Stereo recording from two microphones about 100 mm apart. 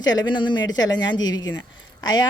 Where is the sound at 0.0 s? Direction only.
45° left (ahead or behind).